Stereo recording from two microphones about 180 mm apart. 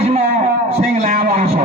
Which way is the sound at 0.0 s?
40° right (ahead or behind).